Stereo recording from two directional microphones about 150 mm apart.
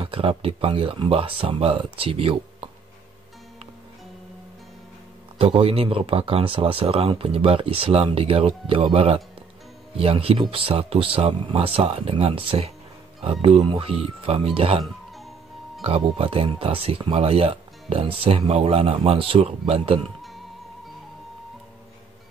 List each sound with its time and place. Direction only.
0.0 s speech: 35° right (ahead or behind)
5.4 s speech: 40° right (ahead or behind)
15.8 s speech: 40° right (ahead or behind)